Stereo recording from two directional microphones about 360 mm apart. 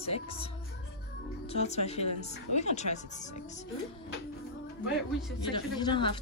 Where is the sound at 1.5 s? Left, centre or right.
Centre.